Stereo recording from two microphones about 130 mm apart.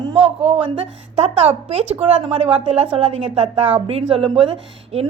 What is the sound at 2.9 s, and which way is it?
A woman's voice, 45° right (ahead or behind).